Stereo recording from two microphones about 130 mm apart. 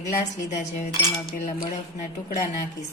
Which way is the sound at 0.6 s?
60° left (ahead or behind).